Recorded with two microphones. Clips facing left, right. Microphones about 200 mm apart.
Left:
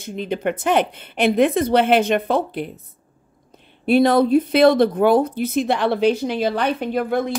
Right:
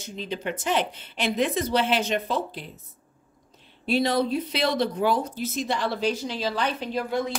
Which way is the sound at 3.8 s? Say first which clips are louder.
Left 8 dB; 55° left (ahead or behind).